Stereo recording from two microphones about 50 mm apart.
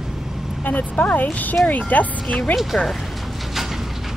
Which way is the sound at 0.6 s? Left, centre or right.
Left.